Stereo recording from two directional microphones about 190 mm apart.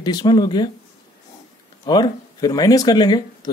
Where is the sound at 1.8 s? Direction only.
20° left (ahead or behind).